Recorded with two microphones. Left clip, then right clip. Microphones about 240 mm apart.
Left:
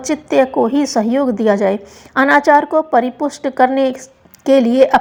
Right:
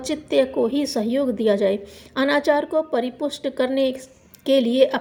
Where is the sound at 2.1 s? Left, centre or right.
Left.